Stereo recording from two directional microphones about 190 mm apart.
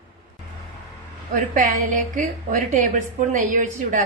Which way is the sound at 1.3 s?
40° right (ahead or behind).